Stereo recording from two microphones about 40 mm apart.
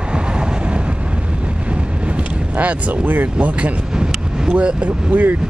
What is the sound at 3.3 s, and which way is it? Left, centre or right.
Speech, right.